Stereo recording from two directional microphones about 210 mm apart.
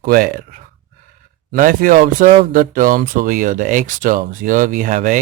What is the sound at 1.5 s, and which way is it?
Speech, 40° right (ahead or behind).